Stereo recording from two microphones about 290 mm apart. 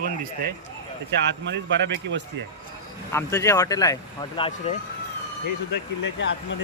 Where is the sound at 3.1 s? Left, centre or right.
Centre.